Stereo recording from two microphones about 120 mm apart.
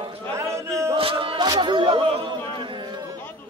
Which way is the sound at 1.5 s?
40° right (ahead or behind).